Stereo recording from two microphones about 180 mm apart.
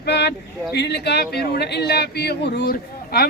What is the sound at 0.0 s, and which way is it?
Speech, 70° left (ahead or behind).